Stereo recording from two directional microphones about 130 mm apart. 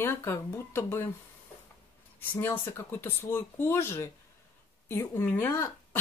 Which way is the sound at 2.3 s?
15° left (ahead or behind).